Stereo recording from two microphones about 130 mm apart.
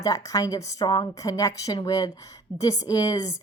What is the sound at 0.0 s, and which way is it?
A woman's voice, 25° left (ahead or behind).